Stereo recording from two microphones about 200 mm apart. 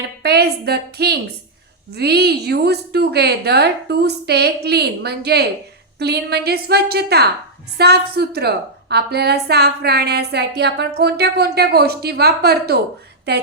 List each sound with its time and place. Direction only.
0.2 s a woman's voice: 55° right (ahead or behind)